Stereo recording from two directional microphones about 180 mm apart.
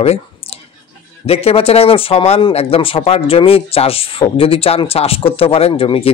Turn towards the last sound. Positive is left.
turn(degrees=30)  # may be behind; listen again after turning